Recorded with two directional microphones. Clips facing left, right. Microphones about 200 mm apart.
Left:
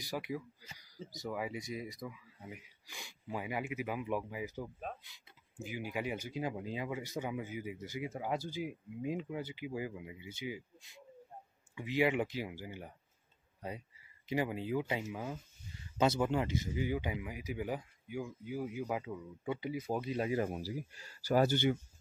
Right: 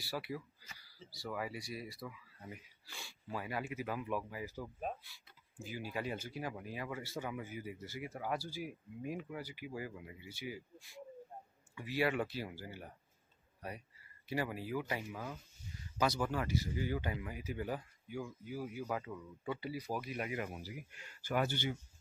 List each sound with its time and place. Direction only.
0.0 s speech: 15° left (ahead or behind); by 21.5 s 40° left (ahead or behind)